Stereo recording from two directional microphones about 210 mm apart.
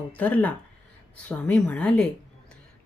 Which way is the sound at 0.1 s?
5° left (ahead or behind).